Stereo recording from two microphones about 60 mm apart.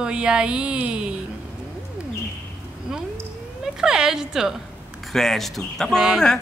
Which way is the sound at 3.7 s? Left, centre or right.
Centre.